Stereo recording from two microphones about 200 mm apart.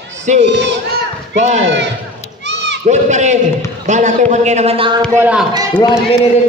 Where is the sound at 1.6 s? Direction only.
60° right (ahead or behind).